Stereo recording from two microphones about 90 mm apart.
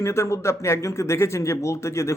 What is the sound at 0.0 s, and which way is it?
A man's voice, 30° left (ahead or behind).